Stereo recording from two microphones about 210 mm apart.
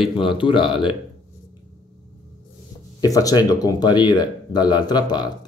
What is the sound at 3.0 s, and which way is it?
Speech, 15° left (ahead or behind).